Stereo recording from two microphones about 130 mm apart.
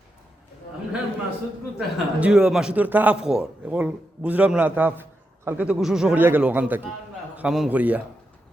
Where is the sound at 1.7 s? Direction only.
10° right (ahead or behind).